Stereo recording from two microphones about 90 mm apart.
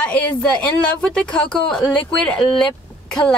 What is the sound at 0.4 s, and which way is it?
A woman's voice, 10° left (ahead or behind).